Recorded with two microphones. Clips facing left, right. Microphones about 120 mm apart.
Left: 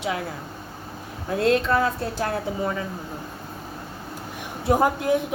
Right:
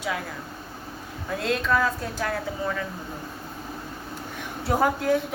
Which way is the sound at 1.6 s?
30° left (ahead or behind).